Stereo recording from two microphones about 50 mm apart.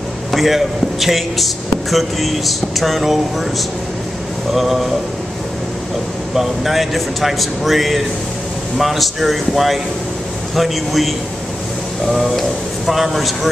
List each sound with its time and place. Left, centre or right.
0.3 s speech: centre
4.6 s speech: centre
6.3 s speech: centre